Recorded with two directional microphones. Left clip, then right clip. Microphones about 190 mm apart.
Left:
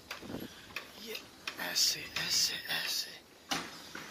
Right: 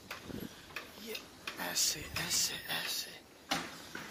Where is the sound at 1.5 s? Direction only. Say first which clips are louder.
Left 3 dB; 25° right (ahead or behind).